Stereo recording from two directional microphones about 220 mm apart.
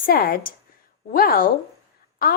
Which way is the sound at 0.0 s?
40° left (ahead or behind).